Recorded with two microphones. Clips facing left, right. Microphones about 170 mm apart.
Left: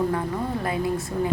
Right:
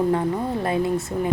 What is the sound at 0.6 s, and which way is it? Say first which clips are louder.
Speech: right 5 dB; 25° right (ahead or behind).